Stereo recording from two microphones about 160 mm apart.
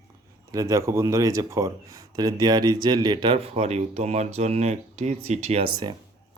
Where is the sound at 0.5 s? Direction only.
20° right (ahead or behind).